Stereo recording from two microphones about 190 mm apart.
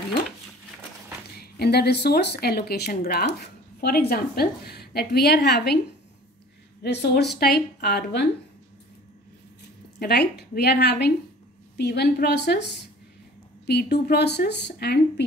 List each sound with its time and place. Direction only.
1.4 s speech: 55° left (ahead or behind)
6.8 s speech: 60° left (ahead or behind)
9.9 s speech: 60° left (ahead or behind)